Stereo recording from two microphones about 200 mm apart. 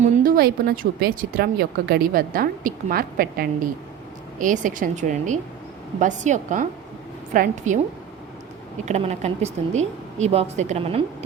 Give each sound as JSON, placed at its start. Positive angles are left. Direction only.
{"t": 0.0, "sound": "speech", "side_deg": -45}
{"t": 8.8, "sound": "speech", "side_deg": -35}